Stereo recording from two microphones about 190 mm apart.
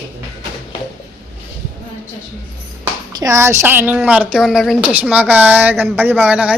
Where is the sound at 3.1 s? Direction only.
15° right (ahead or behind).